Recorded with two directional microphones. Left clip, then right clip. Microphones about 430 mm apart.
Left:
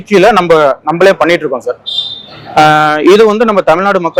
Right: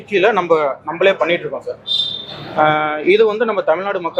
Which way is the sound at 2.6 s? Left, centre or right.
Left.